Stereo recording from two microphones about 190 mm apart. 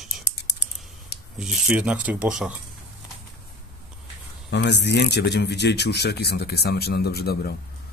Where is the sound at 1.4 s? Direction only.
5° right (ahead or behind).